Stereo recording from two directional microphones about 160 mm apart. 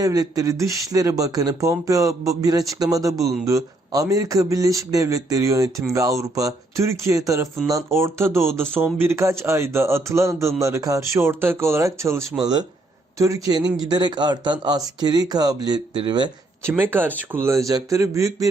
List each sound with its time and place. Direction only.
0.0 s speech: 25° right (ahead or behind)
16.6 s speech: 15° right (ahead or behind)